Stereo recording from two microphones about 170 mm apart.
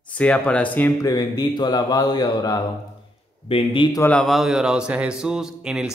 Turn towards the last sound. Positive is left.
turn(degrees=-5)  # may be behind; listen again after turning